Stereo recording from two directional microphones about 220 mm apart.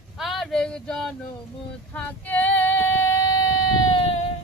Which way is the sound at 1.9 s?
5° left (ahead or behind).